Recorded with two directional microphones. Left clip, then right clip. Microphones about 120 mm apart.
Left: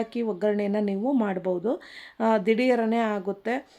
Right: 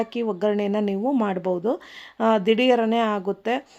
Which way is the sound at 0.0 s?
20° right (ahead or behind).